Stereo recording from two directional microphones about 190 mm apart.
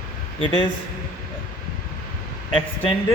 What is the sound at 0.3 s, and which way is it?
Speech, 25° left (ahead or behind).